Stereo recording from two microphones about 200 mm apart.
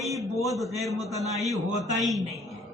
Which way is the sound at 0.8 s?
Centre (ahead or behind).